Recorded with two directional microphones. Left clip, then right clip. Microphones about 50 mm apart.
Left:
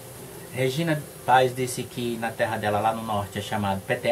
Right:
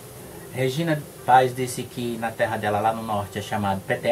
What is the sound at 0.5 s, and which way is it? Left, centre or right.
Speech, centre.